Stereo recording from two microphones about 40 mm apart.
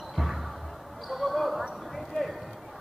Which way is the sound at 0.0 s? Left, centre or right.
Centre.